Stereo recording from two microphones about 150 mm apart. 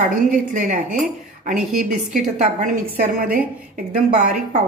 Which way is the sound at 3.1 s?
70° right (ahead or behind).